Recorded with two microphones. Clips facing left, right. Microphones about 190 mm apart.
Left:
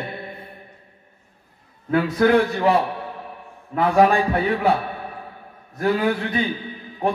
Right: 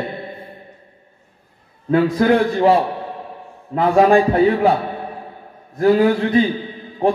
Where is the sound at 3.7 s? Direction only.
25° right (ahead or behind).